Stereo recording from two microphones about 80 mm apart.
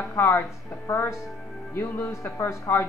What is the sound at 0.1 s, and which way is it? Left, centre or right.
Speech, left.